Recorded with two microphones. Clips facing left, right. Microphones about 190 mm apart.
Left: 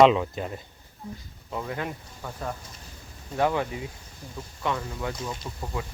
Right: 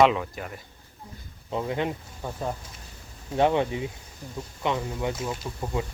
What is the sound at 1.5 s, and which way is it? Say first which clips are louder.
Speech: right 4 dB; 20° right (ahead or behind).